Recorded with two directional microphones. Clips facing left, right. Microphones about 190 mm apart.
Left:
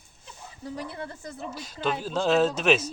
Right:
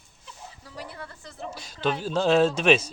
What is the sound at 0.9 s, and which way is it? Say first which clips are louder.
Speech: left 5 dB; 20° left (ahead or behind).